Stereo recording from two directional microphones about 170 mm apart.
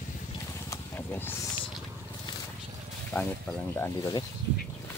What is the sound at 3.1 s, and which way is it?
Speech, 5° left (ahead or behind).